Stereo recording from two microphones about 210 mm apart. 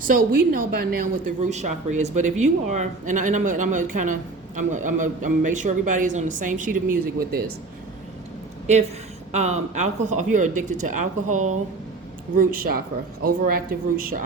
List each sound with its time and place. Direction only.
0.0 s a woman's voice: 40° right (ahead or behind)
9.3 s a woman's voice: 35° right (ahead or behind)